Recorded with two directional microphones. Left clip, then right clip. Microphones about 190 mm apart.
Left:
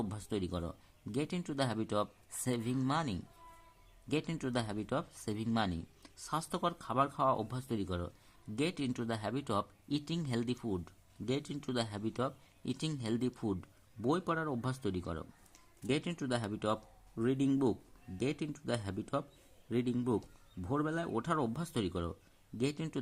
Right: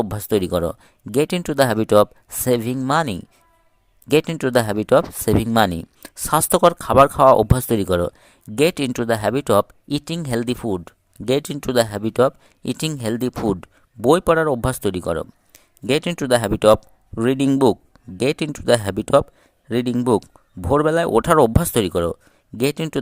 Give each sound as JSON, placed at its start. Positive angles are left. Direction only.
{"t": 0.0, "sound": "speech", "side_deg": -45}